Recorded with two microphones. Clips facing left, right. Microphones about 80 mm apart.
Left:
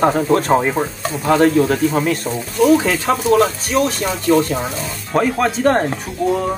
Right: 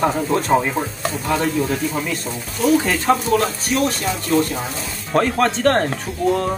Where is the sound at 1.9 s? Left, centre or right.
Left.